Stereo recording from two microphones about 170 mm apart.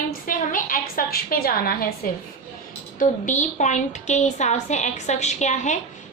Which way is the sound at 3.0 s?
45° left (ahead or behind).